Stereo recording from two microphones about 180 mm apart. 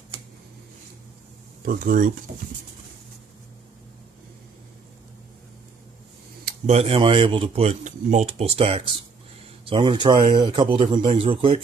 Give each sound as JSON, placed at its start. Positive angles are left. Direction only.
{"t": 1.6, "sound": "speech", "side_deg": -50}
{"t": 6.6, "sound": "a man's voice", "side_deg": -35}